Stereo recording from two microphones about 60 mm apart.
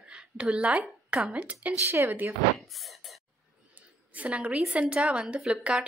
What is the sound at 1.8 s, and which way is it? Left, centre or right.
Speech, right.